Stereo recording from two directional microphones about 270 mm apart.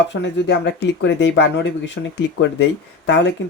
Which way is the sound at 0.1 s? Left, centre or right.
Left.